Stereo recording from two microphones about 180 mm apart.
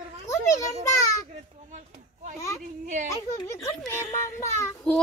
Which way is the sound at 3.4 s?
15° left (ahead or behind).